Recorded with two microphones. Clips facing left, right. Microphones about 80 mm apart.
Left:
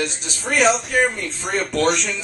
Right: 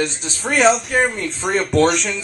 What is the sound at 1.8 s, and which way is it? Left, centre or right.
Speech, centre.